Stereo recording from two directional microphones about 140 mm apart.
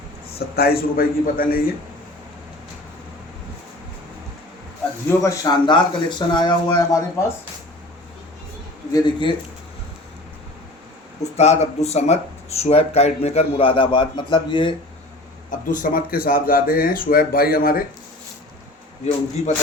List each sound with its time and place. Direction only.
0.3 s speech: 90° left
5.0 s speech: 20° left (ahead or behind)
8.9 s speech: 30° left (ahead or behind)
11.2 s speech: 50° left (ahead or behind)
15.4 s speech: 75° left (ahead or behind); by 17.8 s 90° left